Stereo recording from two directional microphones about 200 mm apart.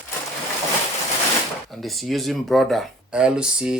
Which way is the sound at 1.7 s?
Centre (ahead or behind).